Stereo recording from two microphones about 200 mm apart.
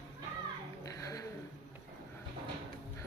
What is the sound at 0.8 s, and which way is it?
Dog, 15° left (ahead or behind).